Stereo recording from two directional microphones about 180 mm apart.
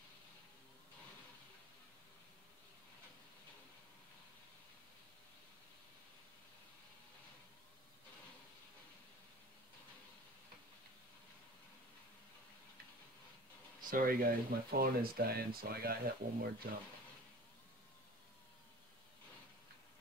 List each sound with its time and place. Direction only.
13.8 s speech: 50° right (ahead or behind)